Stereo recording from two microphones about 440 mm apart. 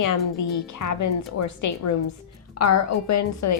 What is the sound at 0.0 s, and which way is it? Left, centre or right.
A woman's voice, left.